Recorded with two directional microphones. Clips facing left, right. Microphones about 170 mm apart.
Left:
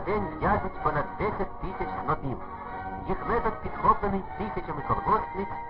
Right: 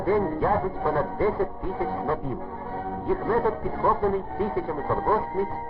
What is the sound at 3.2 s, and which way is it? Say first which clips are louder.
Speech: right 4 dB; 35° right (ahead or behind).